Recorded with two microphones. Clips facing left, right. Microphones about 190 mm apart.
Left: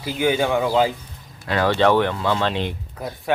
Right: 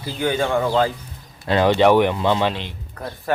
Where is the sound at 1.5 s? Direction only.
20° right (ahead or behind).